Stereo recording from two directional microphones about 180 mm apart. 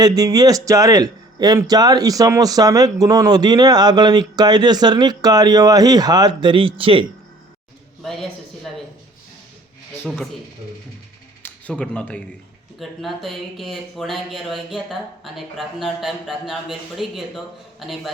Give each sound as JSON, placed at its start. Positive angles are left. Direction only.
{"t": 0.0, "sound": "speech", "side_deg": -20}
{"t": 8.0, "sound": "a sound", "side_deg": 0}
{"t": 11.4, "sound": "speech", "side_deg": 10}